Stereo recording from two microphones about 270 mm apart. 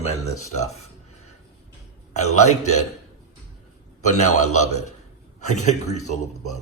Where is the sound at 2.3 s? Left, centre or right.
Left.